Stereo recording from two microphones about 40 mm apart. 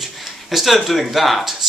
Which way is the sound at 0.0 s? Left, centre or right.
Centre.